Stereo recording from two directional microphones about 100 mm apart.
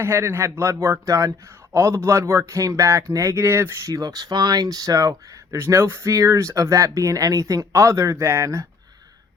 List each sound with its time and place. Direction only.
0.0 s speech: 25° right (ahead or behind)
3.9 s speech: 40° right (ahead or behind)